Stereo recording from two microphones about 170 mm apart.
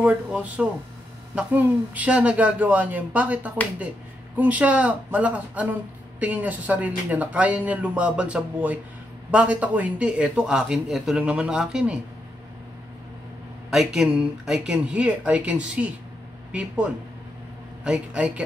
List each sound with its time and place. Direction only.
0.0 s speech: 10° right (ahead or behind)
13.7 s speech: 5° right (ahead or behind)